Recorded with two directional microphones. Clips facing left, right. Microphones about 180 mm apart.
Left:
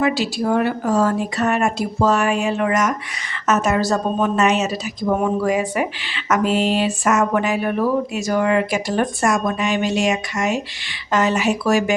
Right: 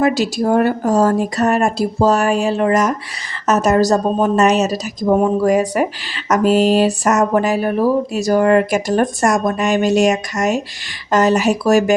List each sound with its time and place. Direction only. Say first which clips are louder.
0.0 s a woman's voice: right 4 dB; 45° right (ahead or behind)